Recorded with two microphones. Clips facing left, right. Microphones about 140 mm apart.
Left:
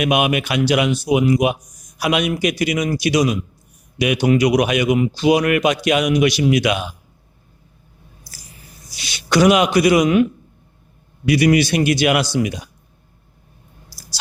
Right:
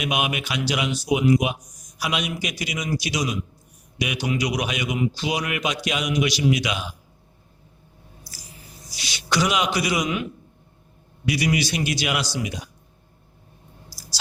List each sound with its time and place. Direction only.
0.0 s a man's voice: 60° left (ahead or behind)
8.9 s a man's voice: 55° left (ahead or behind)
11.3 s a man's voice: 55° left (ahead or behind)